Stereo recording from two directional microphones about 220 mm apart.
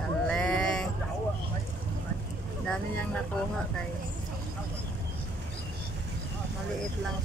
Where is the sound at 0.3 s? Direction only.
5° left (ahead or behind).